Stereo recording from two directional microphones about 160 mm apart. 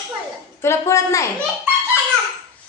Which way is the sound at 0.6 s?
15° left (ahead or behind).